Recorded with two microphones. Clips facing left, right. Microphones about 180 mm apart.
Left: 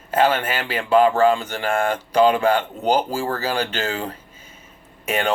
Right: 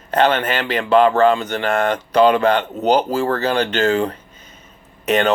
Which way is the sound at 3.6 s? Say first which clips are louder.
Right 8 dB; 65° right (ahead or behind).